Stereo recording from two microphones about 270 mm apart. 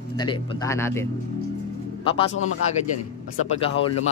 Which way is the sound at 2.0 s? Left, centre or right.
Centre.